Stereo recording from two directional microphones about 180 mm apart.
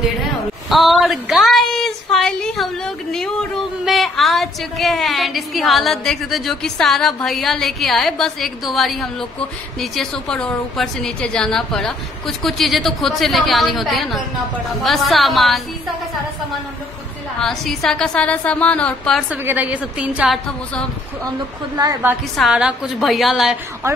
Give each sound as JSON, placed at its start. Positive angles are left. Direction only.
{"t": 0.7, "sound": "a sound", "side_deg": 0}
{"t": 3.8, "sound": "a woman's voice", "side_deg": 0}
{"t": 17.4, "sound": "a woman's voice", "side_deg": 0}
{"t": 19.3, "sound": "a woman's voice", "side_deg": -10}
{"t": 21.7, "sound": "a woman's voice", "side_deg": -20}
{"t": 22.4, "sound": "a woman's voice", "side_deg": -5}